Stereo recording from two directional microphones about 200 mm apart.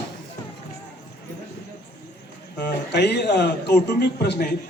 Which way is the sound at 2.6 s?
55° left (ahead or behind).